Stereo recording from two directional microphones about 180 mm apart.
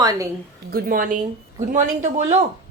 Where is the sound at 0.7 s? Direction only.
50° right (ahead or behind).